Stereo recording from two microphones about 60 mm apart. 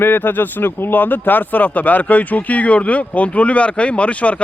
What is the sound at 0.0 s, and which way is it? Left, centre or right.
Speech, left.